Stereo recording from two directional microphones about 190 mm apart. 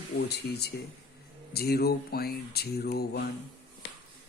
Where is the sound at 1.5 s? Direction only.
55° left (ahead or behind).